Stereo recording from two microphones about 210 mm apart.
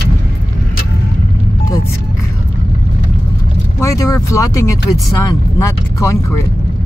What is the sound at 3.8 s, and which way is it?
Speech, 15° left (ahead or behind).